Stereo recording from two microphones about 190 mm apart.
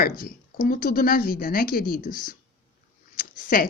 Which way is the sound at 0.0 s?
50° left (ahead or behind).